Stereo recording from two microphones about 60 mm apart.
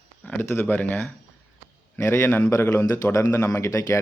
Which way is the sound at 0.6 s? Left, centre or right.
Left.